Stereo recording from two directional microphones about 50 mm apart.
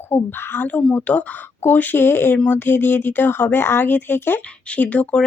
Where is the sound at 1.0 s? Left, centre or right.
Left.